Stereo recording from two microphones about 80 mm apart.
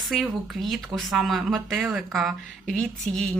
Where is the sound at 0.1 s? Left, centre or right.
Centre.